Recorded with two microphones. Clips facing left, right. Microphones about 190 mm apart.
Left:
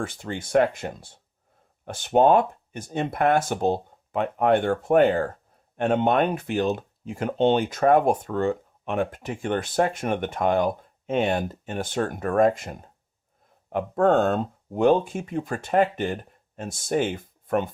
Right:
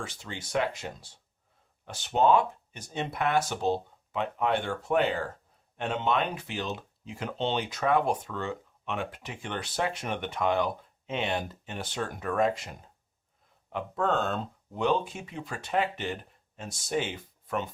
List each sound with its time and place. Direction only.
0.0 s speech: 50° left (ahead or behind)